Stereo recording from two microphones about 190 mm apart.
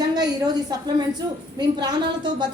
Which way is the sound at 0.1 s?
20° right (ahead or behind).